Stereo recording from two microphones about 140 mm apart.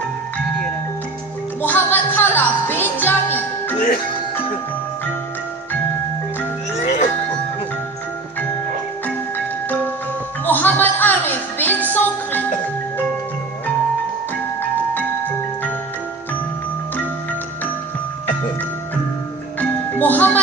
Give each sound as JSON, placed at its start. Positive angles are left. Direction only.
{"t": 1.6, "sound": "music", "side_deg": 15}
{"t": 6.8, "sound": "music", "side_deg": 60}
{"t": 10.4, "sound": "music", "side_deg": 15}
{"t": 15.0, "sound": "music", "side_deg": 15}
{"t": 19.6, "sound": "music", "side_deg": 10}